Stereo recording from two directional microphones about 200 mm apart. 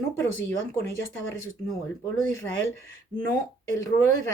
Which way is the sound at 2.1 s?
15° left (ahead or behind).